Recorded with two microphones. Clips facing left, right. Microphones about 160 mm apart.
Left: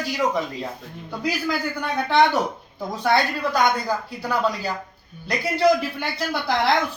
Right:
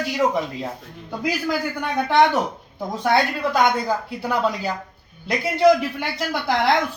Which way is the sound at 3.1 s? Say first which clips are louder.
Right 1 dB; 20° right (ahead or behind).